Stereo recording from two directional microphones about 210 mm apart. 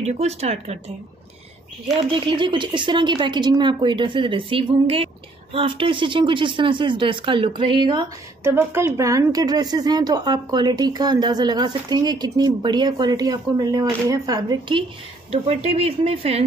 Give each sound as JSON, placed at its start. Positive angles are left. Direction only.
{"t": 0.0, "sound": "speech", "side_deg": -30}
{"t": 2.0, "sound": "speech", "side_deg": -25}
{"t": 8.5, "sound": "speech", "side_deg": -10}